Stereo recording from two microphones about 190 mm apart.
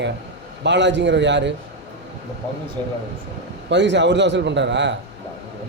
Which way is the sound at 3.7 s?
65° right (ahead or behind).